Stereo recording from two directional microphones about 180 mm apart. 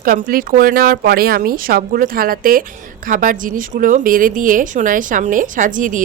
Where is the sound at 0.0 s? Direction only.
50° right (ahead or behind).